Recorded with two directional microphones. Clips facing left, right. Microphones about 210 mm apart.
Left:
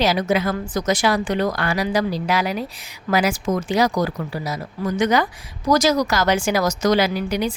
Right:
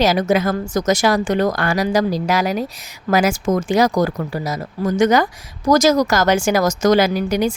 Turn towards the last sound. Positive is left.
turn(degrees=-45)  # may be behind; listen again after turning